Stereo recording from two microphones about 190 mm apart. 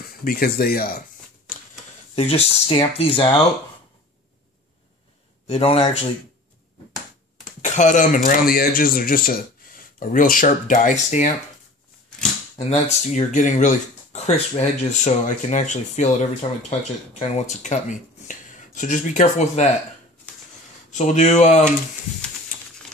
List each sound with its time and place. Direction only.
0.2 s speech: 50° left (ahead or behind)
2.1 s speech: 30° left (ahead or behind)
5.5 s speech: 30° left (ahead or behind)
7.6 s speech: 40° left (ahead or behind)
12.5 s speech: 35° left (ahead or behind)
20.9 s speech: 40° left (ahead or behind)